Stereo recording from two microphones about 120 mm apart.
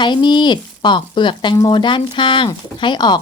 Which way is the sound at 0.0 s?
40° left (ahead or behind).